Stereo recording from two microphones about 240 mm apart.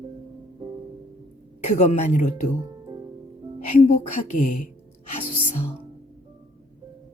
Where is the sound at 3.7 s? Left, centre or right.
Left.